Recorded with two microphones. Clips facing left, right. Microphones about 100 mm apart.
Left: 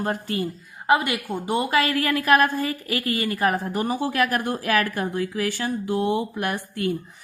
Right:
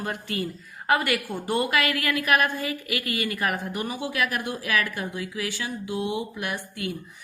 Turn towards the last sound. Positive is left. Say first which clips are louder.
# left 6 dB
turn(degrees=45)  # may be behind; listen again after turning